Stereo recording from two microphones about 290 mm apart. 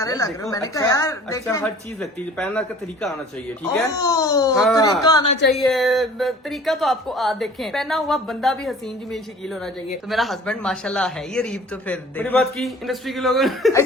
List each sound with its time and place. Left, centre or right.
0.0 s speech: centre
5.5 s speech: centre